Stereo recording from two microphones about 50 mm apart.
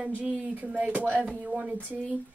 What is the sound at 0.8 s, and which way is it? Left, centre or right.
A woman's voice, right.